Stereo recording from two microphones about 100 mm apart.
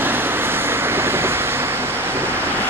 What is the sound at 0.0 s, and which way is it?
Vehicle, 20° right (ahead or behind).